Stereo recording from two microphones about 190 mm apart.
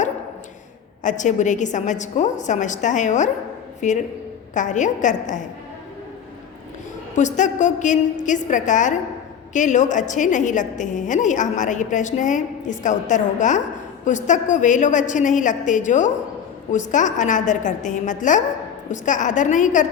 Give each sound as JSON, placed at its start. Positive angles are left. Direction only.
{"t": 1.0, "sound": "a woman's voice", "side_deg": 40}
{"t": 7.2, "sound": "a woman's voice", "side_deg": 40}